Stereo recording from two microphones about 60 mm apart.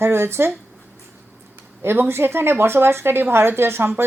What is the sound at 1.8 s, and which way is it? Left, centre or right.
Speech, right.